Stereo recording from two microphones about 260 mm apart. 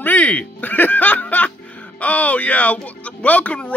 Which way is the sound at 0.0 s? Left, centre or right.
Centre.